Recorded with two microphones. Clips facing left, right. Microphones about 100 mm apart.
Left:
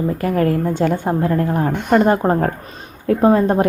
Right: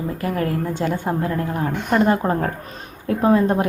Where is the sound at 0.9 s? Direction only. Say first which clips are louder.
Left 4 dB; 20° left (ahead or behind).